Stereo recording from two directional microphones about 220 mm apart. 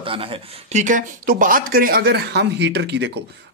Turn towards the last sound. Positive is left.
turn(degrees=-50)  # may be behind; listen again after turning